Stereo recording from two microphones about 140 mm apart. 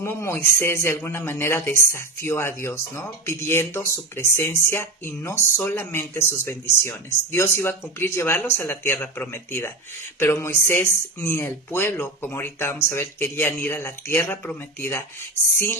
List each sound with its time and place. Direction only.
0.0 s speech: 20° left (ahead or behind)